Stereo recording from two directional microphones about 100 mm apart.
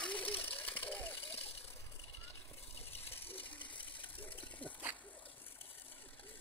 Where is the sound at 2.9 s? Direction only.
70° left (ahead or behind).